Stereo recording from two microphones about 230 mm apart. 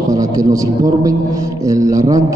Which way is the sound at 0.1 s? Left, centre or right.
Centre.